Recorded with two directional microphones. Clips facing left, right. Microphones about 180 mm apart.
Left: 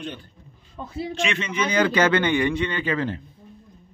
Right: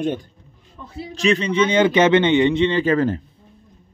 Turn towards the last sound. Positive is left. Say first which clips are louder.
# right 7 dB
turn(degrees=-45)  # may be behind; listen again after turning